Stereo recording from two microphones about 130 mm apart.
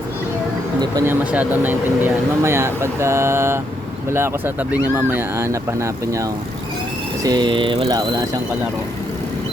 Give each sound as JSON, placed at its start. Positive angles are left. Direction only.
{"t": 1.0, "sound": "speech", "side_deg": -10}
{"t": 7.3, "sound": "speech", "side_deg": -35}
{"t": 7.9, "sound": "speech", "side_deg": -30}